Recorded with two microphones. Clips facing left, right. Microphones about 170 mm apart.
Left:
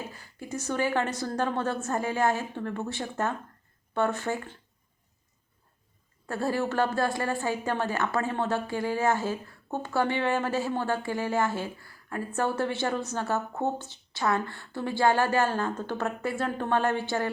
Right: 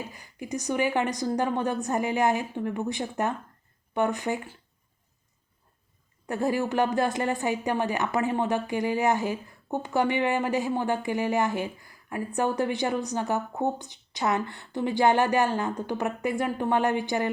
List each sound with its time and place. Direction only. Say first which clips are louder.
0.1 s a woman's voice: right 3 dB; 15° right (ahead or behind)
6.2 s a woman's voice: right 2 dB; 15° right (ahead or behind)